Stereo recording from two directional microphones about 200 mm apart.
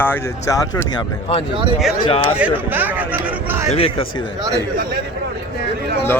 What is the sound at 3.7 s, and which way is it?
Speech, 30° left (ahead or behind).